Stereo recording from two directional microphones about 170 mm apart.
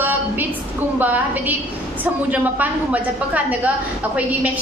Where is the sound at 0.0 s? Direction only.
10° right (ahead or behind).